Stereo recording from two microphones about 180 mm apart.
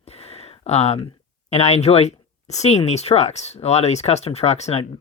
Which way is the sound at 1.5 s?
35° left (ahead or behind).